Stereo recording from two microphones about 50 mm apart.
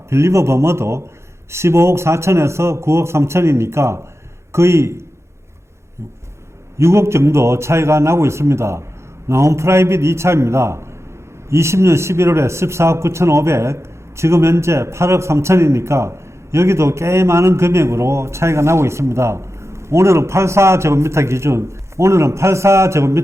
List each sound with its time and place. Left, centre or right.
0.1 s a man's voice: right
6.7 s a man's voice: right